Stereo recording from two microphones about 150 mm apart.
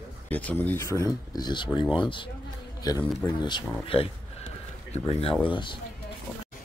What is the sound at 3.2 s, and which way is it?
Speech, 30° left (ahead or behind).